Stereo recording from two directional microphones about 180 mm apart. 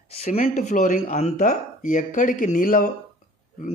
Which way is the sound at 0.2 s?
35° left (ahead or behind).